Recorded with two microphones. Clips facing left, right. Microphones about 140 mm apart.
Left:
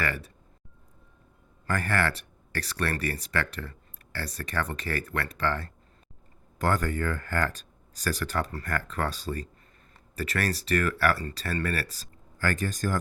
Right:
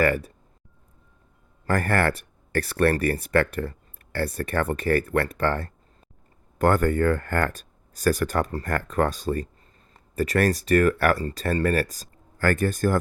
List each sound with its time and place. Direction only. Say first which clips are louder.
0.0 s speech: right 10 dB; 45° right (ahead or behind)
1.6 s speech: right 5 dB; 50° right (ahead or behind)